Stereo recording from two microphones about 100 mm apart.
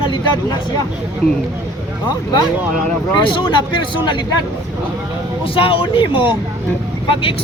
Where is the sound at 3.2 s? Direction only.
55° left (ahead or behind).